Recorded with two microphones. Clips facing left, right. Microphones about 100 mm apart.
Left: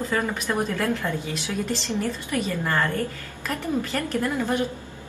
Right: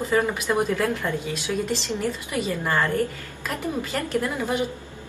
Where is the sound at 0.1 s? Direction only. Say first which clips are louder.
Right 5 dB; 15° right (ahead or behind).